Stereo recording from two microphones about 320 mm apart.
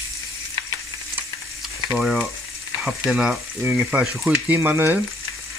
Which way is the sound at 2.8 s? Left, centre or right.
Centre.